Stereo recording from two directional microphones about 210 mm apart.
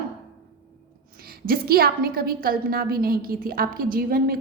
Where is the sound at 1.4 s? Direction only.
45° right (ahead or behind).